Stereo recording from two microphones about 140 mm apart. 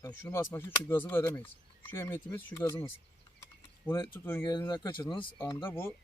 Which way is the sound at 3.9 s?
15° left (ahead or behind).